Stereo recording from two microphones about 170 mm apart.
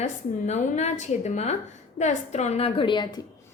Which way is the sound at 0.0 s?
45° left (ahead or behind).